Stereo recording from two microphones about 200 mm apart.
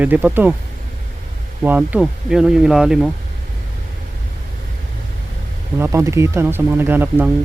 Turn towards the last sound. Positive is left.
turn(degrees=-10)  # may be behind; listen again after turning